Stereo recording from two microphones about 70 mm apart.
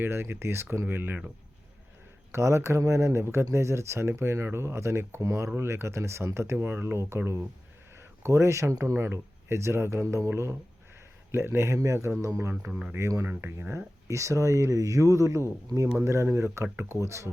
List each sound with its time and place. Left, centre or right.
0.0 s speech: right
2.3 s speech: right
7.9 s a sound: right
8.8 s speech: right
12.7 s speech: right
13.0 s speech: right